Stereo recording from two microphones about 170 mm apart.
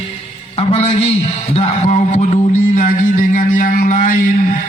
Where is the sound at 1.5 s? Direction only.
40° left (ahead or behind).